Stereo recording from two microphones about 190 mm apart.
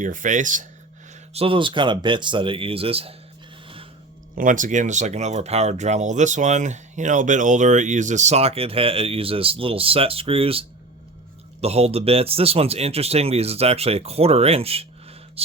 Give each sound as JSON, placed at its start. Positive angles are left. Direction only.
{"t": 0.0, "sound": "speech", "side_deg": -45}
{"t": 1.3, "sound": "speech", "side_deg": -30}
{"t": 4.4, "sound": "speech", "side_deg": -45}